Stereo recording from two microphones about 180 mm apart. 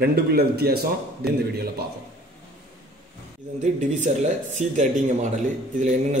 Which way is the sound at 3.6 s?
40° right (ahead or behind).